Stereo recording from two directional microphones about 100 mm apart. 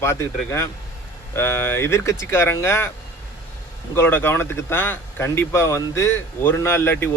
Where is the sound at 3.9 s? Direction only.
20° left (ahead or behind).